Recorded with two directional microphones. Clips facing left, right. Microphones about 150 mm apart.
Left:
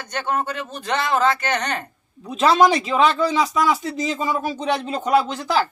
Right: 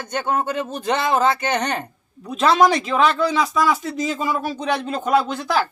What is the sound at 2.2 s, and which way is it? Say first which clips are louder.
Speech: even; 5° left (ahead or behind).